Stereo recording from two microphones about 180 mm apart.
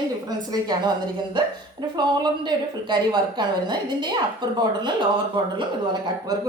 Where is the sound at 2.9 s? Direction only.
25° right (ahead or behind).